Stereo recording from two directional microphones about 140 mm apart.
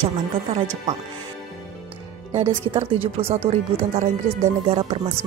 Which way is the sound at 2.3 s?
45° right (ahead or behind).